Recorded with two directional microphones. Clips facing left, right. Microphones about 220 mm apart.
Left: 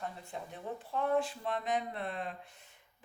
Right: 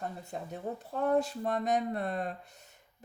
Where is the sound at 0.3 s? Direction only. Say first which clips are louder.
Right 5 dB; 45° right (ahead or behind).